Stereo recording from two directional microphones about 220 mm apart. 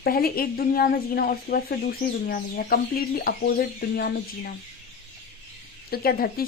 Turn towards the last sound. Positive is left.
turn(degrees=45)  # may be behind; listen again after turning